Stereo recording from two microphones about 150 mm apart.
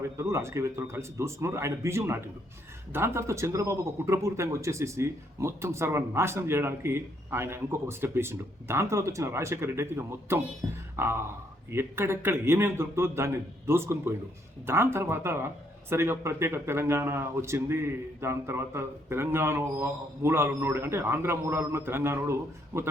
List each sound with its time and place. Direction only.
0.2 s speech: 20° right (ahead or behind)